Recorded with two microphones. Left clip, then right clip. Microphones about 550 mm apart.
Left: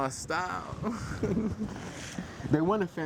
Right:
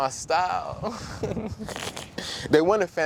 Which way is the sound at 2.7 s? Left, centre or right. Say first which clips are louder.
Right 7 dB; right.